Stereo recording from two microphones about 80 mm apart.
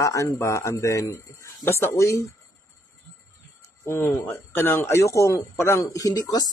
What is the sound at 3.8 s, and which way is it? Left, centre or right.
Speech, left.